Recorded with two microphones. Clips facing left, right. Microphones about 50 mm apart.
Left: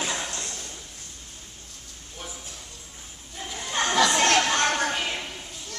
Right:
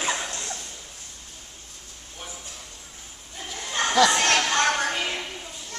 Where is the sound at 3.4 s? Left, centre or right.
Centre.